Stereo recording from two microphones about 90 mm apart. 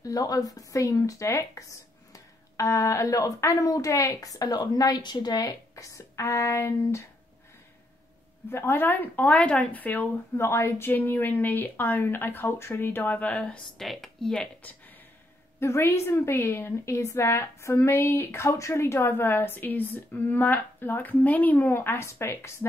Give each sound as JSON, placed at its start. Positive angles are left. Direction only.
{"t": 0.0, "sound": "a woman's voice", "side_deg": 40}
{"t": 8.5, "sound": "a woman's voice", "side_deg": 25}
{"t": 13.7, "sound": "speech", "side_deg": 5}
{"t": 15.6, "sound": "a woman's voice", "side_deg": 30}